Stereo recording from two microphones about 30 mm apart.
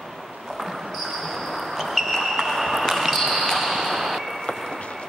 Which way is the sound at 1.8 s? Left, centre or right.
Centre.